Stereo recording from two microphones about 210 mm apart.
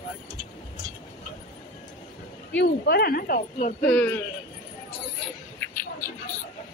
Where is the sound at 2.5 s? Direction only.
50° left (ahead or behind).